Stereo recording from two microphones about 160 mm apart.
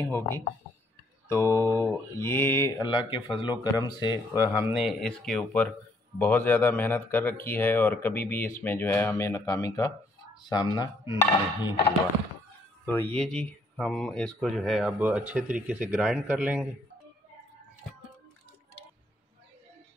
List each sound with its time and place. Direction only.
0.0 s mantra: 15° left (ahead or behind)
2.9 s speech: 30° left (ahead or behind)
4.1 s speech: 15° right (ahead or behind); by 5.7 s 5° left (ahead or behind)
6.1 s mantra: 10° left (ahead or behind)
10.5 s speech: 25° left (ahead or behind)
12.8 s speech: 10° left (ahead or behind); by 16.6 s 10° right (ahead or behind)